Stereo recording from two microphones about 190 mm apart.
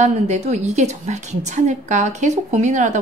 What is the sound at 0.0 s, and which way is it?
A woman's voice, 35° right (ahead or behind).